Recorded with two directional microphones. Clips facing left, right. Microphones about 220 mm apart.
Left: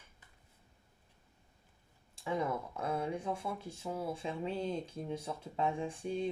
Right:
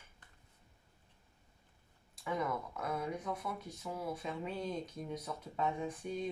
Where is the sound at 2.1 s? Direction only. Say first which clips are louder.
Left 2 dB; 30° left (ahead or behind).